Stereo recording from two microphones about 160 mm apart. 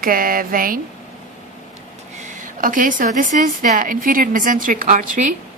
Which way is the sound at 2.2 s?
55° right (ahead or behind).